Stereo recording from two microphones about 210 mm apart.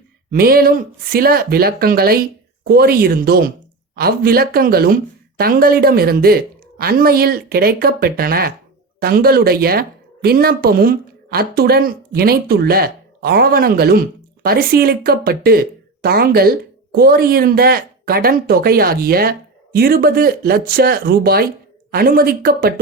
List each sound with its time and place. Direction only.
0.3 s speech: 45° right (ahead or behind)